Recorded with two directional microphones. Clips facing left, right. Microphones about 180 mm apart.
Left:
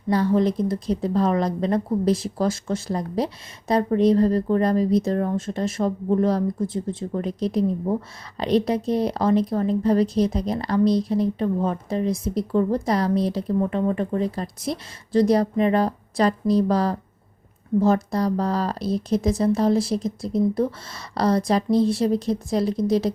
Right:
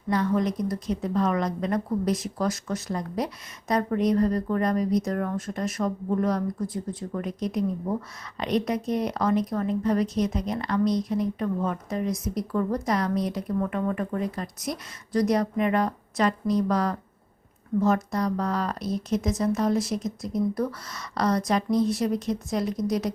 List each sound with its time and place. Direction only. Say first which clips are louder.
0.1 s speech: left 5 dB; 30° left (ahead or behind)